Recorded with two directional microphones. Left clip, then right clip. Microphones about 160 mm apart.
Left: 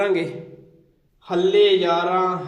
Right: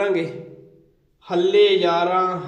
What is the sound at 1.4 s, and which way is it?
Speech, 15° left (ahead or behind).